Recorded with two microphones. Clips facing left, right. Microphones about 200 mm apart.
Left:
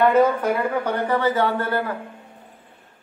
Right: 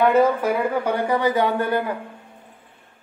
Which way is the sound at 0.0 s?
10° right (ahead or behind).